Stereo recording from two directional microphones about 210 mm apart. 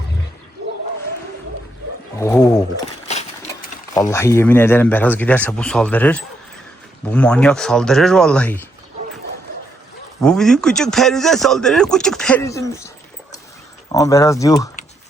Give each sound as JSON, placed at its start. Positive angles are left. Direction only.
{"t": 2.1, "sound": "speech", "side_deg": 15}
{"t": 3.9, "sound": "speech", "side_deg": 15}
{"t": 10.2, "sound": "speech", "side_deg": 5}
{"t": 13.9, "sound": "speech", "side_deg": 15}